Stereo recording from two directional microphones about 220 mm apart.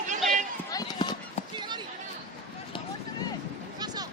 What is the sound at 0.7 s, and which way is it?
Run, 20° left (ahead or behind).